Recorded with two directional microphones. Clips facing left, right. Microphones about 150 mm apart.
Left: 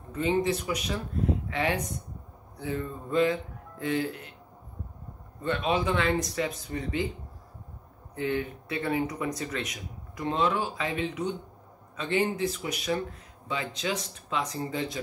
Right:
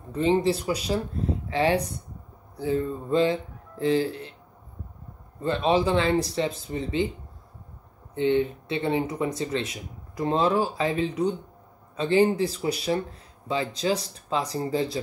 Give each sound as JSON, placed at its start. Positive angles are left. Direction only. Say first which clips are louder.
{"t": 0.1, "sound": "speech", "louder": "right 4 dB", "side_deg": -30}
{"t": 5.4, "sound": "speech", "louder": "right 5 dB", "side_deg": -30}
{"t": 8.1, "sound": "speech", "louder": "right 7 dB", "side_deg": -25}